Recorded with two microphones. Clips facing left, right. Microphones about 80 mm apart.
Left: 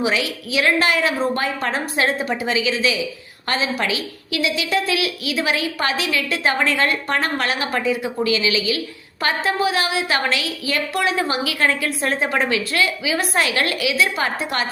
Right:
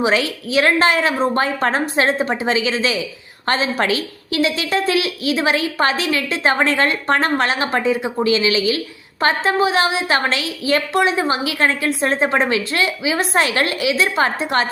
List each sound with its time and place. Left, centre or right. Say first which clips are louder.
0.0 s a woman's voice: right 4 dB; right